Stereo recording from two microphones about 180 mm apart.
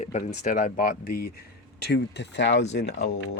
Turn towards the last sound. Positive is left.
turn(degrees=75)  # may be behind; listen again after turning